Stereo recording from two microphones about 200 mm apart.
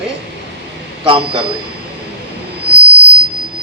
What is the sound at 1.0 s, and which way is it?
Speech, 25° right (ahead or behind).